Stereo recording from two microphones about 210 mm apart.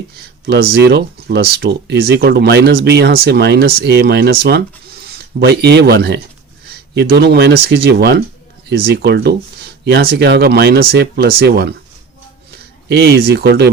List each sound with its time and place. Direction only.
0.4 s speech: 50° right (ahead or behind)
12.9 s speech: 50° right (ahead or behind)